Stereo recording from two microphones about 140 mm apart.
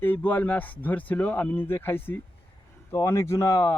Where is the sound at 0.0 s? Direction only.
15° left (ahead or behind).